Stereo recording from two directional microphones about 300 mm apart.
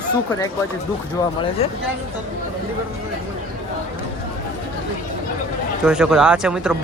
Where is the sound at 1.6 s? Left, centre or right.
Centre.